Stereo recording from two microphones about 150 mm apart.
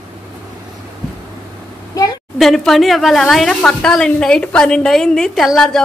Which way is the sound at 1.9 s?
25° left (ahead or behind).